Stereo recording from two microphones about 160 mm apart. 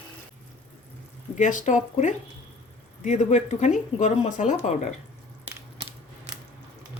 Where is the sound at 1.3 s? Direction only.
50° left (ahead or behind).